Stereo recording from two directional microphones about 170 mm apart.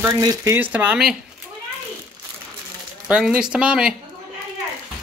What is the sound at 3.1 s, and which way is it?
Speech, 5° right (ahead or behind).